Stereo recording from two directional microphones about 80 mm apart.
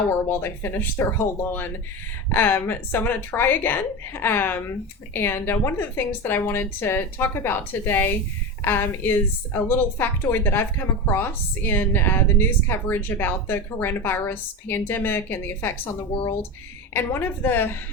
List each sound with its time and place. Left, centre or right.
0.3 s a woman's voice: left
16.9 s a woman's voice: left